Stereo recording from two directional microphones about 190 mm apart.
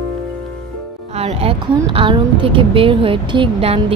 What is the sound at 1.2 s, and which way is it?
Speech, 30° right (ahead or behind).